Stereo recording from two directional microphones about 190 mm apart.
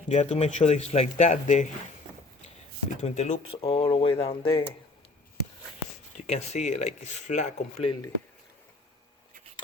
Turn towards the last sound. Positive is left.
turn(degrees=35)  # may be behind; listen again after turning